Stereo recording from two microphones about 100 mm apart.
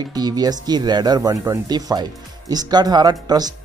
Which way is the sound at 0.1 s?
40° right (ahead or behind).